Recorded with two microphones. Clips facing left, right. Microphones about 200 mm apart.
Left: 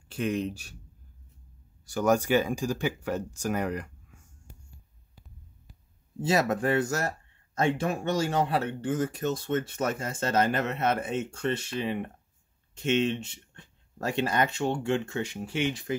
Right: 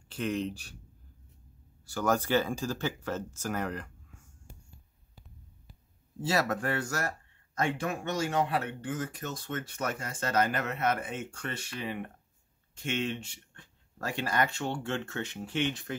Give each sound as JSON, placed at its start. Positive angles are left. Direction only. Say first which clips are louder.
{"t": 0.1, "sound": "speech", "louder": "left 3 dB", "side_deg": 10}
{"t": 1.9, "sound": "speech", "louder": "left 4 dB", "side_deg": 15}
{"t": 6.2, "sound": "speech", "louder": "left 4 dB", "side_deg": 20}